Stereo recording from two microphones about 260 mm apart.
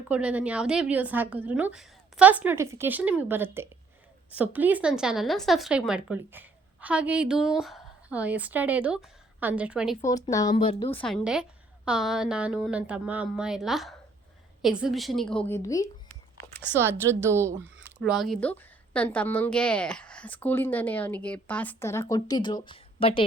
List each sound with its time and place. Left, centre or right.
0.1 s a woman's voice: centre
10.0 s a woman's voice: centre
11.0 s speech: centre
16.7 s a woman's voice: centre; by 23.2 s left